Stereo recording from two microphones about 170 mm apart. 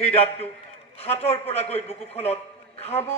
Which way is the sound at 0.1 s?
35° left (ahead or behind).